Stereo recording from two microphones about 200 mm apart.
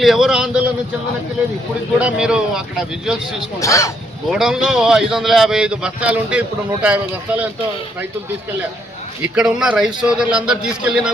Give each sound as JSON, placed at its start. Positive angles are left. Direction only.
{"t": 0.0, "sound": "a man's voice", "side_deg": 0}
{"t": 2.0, "sound": "a man's voice", "side_deg": -5}
{"t": 3.6, "sound": "speech", "side_deg": 15}
{"t": 4.3, "sound": "a man's voice", "side_deg": -5}
{"t": 9.2, "sound": "a man's voice", "side_deg": -5}